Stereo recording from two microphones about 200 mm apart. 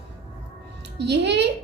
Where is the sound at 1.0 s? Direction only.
60° right (ahead or behind).